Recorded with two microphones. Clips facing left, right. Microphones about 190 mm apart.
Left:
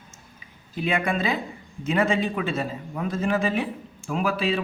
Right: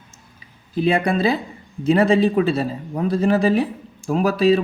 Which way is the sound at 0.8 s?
35° right (ahead or behind).